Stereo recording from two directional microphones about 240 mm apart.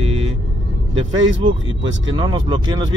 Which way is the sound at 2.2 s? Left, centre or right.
Centre.